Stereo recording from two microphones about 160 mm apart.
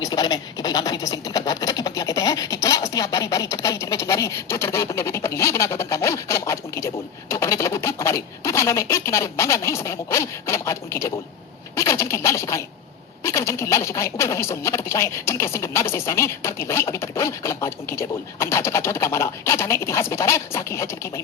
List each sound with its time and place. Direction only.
0.0 s speech: 25° left (ahead or behind)